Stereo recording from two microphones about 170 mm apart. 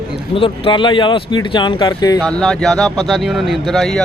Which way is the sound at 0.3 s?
30° left (ahead or behind).